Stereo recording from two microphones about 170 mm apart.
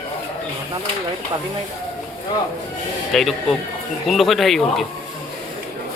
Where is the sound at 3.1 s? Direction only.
Centre (ahead or behind).